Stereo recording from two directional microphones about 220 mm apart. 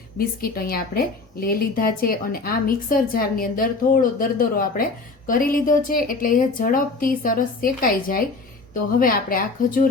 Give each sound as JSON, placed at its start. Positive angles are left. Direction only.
{"t": 0.2, "sound": "a woman's voice", "side_deg": 40}